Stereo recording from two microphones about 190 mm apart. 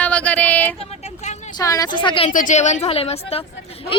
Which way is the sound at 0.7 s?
35° left (ahead or behind).